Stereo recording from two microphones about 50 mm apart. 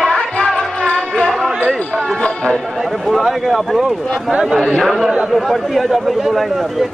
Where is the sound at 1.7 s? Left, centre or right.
Centre.